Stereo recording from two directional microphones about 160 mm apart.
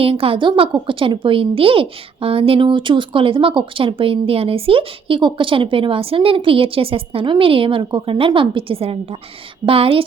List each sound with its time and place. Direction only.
0.0 s a woman's voice: 35° right (ahead or behind)